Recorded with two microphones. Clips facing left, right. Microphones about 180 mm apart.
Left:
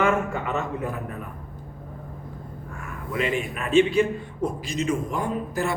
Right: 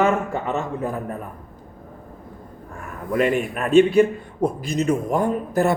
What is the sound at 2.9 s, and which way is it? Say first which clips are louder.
A man's voice: right 6 dB; 45° right (ahead or behind).